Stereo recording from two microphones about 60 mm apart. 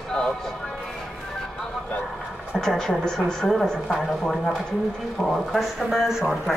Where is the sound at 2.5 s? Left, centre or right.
Centre.